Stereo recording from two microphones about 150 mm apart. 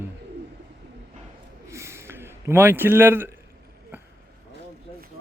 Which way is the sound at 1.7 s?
20° right (ahead or behind).